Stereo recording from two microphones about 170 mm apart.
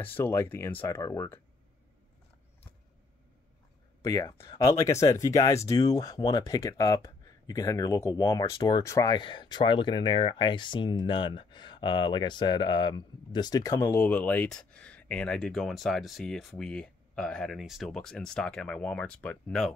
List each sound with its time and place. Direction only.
0.0 s speech: 10° left (ahead or behind)
4.0 s speech: 20° left (ahead or behind); by 19.7 s 5° left (ahead or behind)